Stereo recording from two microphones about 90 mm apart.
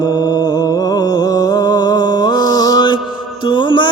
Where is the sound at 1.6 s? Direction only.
50° left (ahead or behind).